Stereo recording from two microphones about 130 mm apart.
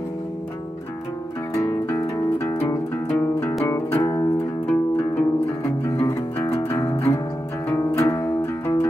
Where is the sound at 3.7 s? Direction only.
25° left (ahead or behind).